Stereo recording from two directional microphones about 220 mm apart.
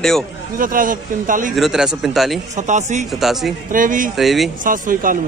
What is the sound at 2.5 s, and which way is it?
Speech, 35° right (ahead or behind).